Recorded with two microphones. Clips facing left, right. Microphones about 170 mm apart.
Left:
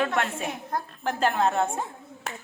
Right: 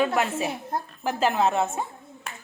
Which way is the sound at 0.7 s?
25° right (ahead or behind).